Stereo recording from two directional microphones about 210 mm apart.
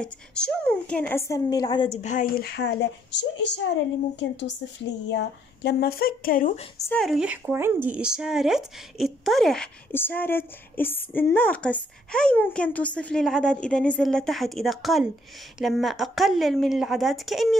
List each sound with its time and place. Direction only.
0.0 s a woman's voice: 5° left (ahead or behind); by 6.6 s 40° left (ahead or behind)
6.9 s speech: centre (ahead or behind)